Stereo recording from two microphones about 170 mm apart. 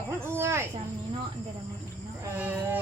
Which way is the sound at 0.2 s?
15° right (ahead or behind).